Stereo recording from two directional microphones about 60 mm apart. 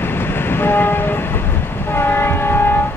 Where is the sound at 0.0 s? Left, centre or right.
Left.